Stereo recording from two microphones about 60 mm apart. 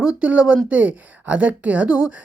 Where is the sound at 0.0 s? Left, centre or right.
Centre.